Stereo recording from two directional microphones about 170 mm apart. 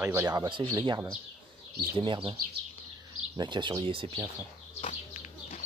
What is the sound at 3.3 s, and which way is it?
Speech, 25° right (ahead or behind).